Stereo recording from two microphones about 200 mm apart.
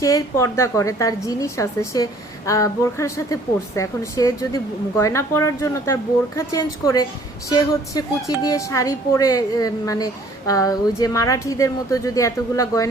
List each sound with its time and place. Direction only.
0.0 s speech: 15° left (ahead or behind)